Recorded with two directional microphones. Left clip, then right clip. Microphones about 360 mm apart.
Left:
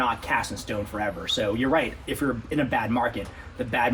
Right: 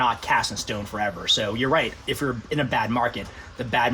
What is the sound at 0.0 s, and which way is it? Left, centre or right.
Speech, right.